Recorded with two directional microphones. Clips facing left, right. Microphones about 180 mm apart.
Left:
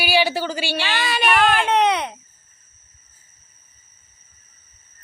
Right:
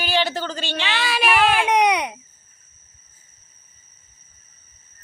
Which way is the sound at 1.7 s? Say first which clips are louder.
Even; 15° right (ahead or behind).